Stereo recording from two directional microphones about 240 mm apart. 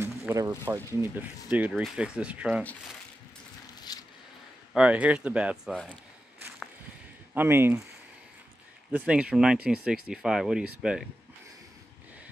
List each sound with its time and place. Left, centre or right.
0.0 s speech: centre
3.9 s a sound: centre
4.7 s speech: centre
7.3 s speech: centre
8.9 s speech: centre